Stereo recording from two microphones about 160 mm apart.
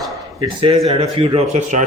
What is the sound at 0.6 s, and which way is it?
Speech, 35° right (ahead or behind).